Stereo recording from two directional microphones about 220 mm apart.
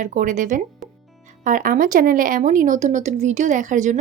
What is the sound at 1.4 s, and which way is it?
Speech, 40° right (ahead or behind).